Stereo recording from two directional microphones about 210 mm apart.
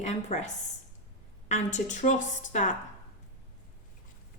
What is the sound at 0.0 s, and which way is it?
A woman's voice, 35° left (ahead or behind).